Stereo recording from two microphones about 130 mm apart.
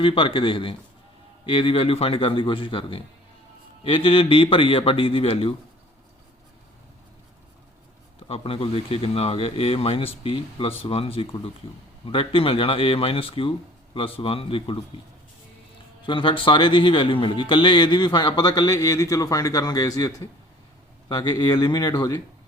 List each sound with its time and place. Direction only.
0.0 s speech: 40° left (ahead or behind)
8.3 s speech: 45° left (ahead or behind)
16.0 s speech: 40° left (ahead or behind)